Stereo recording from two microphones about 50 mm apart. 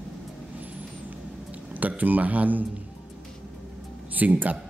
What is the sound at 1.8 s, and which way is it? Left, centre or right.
Speech, right.